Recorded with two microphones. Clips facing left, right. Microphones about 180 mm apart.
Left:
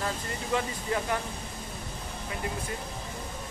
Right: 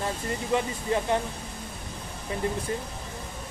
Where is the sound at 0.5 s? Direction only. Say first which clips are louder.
Right 3 dB; 25° right (ahead or behind).